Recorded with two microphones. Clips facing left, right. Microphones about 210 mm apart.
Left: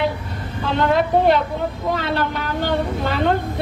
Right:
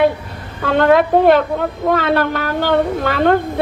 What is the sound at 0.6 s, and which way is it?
Speech, 60° right (ahead or behind).